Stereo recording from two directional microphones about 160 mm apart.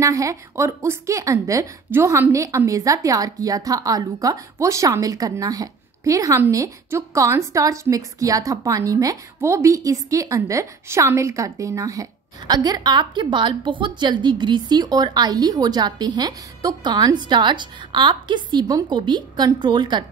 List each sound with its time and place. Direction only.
0.0 s a woman's voice: 20° right (ahead or behind)